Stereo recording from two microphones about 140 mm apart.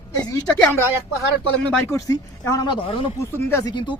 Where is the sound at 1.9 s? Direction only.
20° left (ahead or behind); by 3.1 s 40° left (ahead or behind).